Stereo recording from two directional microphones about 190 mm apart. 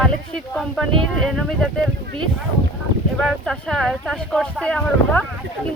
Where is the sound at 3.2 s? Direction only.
Centre (ahead or behind).